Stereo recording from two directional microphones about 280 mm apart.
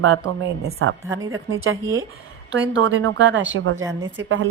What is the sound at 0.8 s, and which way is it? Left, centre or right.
Speech, right.